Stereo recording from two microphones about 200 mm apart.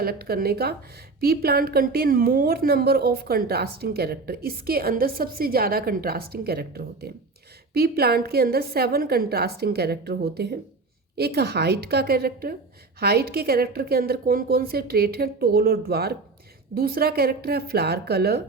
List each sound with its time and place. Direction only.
0.0 s a woman's voice: 50° right (ahead or behind)